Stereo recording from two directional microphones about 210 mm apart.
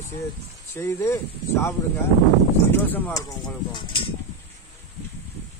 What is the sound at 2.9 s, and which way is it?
Speech, 15° left (ahead or behind).